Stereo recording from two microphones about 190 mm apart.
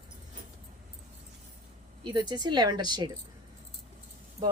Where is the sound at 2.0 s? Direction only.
25° right (ahead or behind).